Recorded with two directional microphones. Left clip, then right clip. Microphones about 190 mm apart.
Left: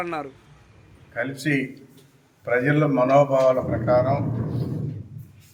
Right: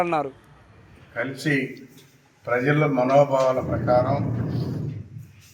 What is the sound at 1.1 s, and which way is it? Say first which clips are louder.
A man's voice: even; 10° left (ahead or behind).